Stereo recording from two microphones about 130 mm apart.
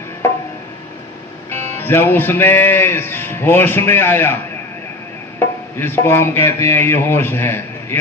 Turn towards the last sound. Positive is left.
turn(degrees=15)  # may be behind; listen again after turning